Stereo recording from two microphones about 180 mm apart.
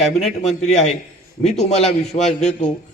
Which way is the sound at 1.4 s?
35° left (ahead or behind).